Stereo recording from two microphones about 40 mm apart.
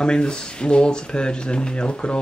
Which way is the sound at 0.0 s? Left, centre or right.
Left.